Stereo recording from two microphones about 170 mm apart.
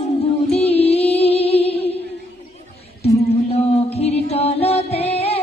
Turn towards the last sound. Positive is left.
turn(degrees=35)  # may be behind; listen again after turning